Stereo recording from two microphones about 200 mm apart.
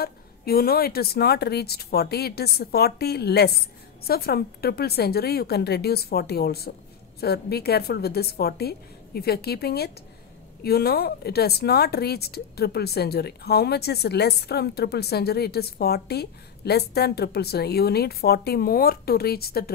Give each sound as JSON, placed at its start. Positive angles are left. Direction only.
{"t": 0.0, "sound": "speech", "side_deg": 50}